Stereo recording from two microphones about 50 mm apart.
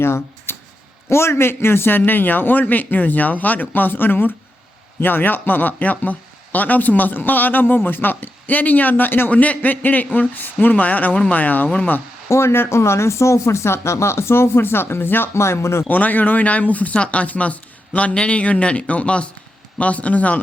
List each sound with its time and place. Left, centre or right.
0.0 s a sound: left
1.1 s speech: left
9.3 s speech: left
12.3 s speech: left
15.4 s speech: left
15.9 s speech: left